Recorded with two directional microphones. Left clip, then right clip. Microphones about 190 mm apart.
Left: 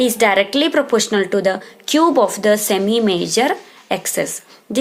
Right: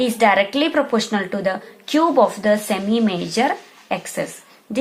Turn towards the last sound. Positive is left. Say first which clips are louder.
# left 4 dB
turn(degrees=35)  # may be behind; listen again after turning